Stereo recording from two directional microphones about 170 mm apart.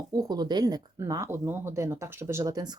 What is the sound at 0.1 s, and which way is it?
Speech, 20° right (ahead or behind).